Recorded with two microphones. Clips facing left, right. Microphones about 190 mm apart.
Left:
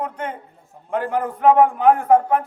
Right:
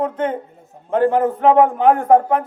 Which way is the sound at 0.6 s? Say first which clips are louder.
Right 3 dB; 40° right (ahead or behind).